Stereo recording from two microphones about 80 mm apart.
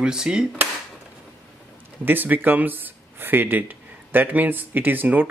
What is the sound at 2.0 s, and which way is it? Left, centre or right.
Speech, right.